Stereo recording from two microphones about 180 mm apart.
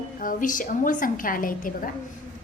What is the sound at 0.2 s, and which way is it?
A woman's voice, 50° left (ahead or behind).